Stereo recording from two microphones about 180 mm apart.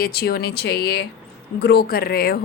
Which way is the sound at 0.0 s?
60° left (ahead or behind).